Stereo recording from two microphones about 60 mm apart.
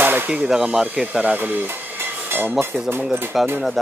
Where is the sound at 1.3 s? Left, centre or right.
Right.